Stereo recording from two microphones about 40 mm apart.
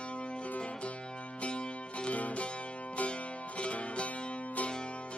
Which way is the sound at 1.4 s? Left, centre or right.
Left.